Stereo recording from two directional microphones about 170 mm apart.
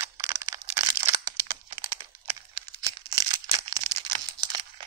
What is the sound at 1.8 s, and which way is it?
Crumpling, 20° right (ahead or behind).